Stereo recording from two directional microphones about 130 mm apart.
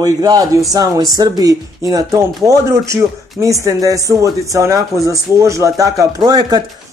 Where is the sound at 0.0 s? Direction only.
30° right (ahead or behind).